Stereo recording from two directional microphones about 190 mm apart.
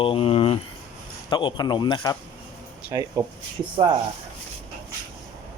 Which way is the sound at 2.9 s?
20° right (ahead or behind).